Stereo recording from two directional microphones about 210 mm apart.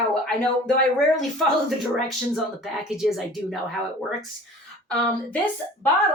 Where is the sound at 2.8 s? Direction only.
Centre (ahead or behind).